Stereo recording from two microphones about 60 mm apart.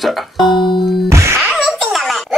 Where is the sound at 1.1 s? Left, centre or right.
Right.